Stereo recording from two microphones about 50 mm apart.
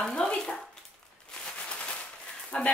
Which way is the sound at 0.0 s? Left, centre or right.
Centre.